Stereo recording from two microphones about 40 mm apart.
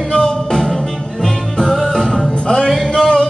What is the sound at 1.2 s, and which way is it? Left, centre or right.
Music, centre.